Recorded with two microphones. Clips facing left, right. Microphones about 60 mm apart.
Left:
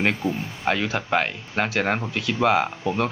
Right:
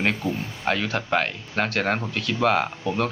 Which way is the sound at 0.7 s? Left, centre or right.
Centre.